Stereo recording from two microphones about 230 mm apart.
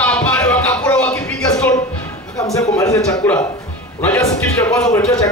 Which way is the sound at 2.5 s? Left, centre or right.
Centre.